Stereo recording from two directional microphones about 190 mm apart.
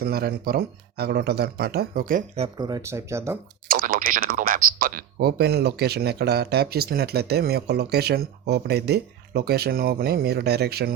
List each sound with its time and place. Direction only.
0.0 s speech: 55° right (ahead or behind)
2.6 s speech: 20° right (ahead or behind)
3.7 s speech: 50° right (ahead or behind)